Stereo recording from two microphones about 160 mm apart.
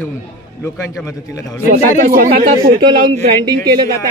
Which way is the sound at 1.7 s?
60° right (ahead or behind).